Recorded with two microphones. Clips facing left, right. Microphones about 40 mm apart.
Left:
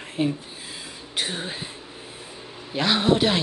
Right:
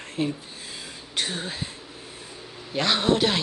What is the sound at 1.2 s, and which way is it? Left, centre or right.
Speech, centre.